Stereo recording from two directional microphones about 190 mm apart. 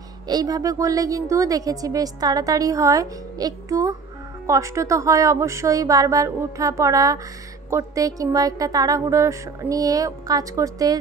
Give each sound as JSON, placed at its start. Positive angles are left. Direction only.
{"t": 0.3, "sound": "a woman's voice", "side_deg": -20}